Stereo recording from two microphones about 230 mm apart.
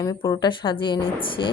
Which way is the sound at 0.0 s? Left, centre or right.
Centre.